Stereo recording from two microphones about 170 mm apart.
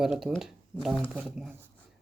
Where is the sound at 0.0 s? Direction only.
Centre (ahead or behind).